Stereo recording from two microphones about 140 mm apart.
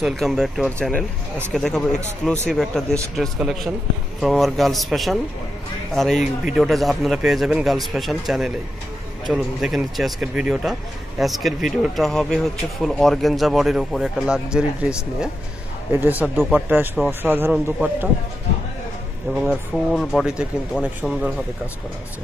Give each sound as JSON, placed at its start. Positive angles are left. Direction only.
{"t": 0.0, "sound": "a man's voice", "side_deg": 0}
{"t": 19.4, "sound": "speech", "side_deg": 0}